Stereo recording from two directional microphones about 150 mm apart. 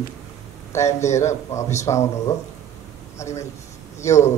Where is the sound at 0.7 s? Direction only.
20° left (ahead or behind).